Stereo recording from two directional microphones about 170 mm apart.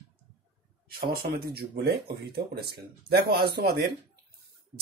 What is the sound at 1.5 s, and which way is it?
Speech, 75° right (ahead or behind).